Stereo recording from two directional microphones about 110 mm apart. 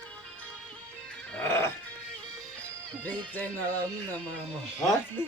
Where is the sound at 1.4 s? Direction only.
20° left (ahead or behind).